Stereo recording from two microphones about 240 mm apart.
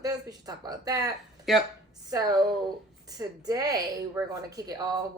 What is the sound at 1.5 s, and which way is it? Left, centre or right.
Speech, centre.